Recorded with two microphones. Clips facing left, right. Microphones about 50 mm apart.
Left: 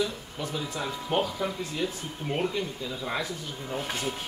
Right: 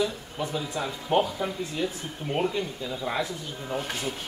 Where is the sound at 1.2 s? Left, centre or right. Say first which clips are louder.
Even; centre.